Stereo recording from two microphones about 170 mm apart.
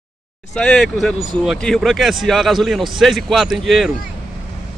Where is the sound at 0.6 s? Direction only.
Centre (ahead or behind).